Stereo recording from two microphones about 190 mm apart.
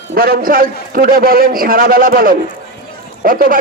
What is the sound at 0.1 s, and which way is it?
A man's voice, 50° right (ahead or behind).